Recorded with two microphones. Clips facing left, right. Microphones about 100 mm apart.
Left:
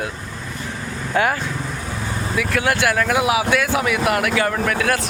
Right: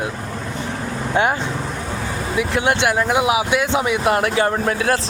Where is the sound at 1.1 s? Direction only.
20° right (ahead or behind).